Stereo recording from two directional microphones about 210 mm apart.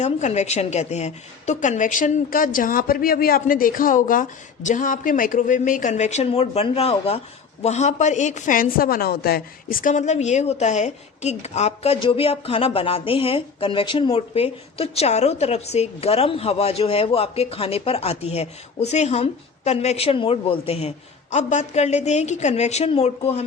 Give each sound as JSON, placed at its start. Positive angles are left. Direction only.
{"t": 0.0, "sound": "a woman's voice", "side_deg": 35}